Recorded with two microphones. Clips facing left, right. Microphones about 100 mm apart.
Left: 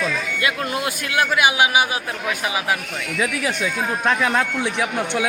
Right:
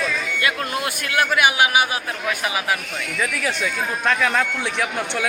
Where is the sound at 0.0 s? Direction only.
20° left (ahead or behind).